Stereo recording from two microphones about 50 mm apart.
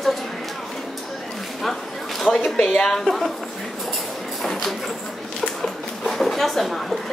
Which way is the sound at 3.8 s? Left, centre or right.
Centre.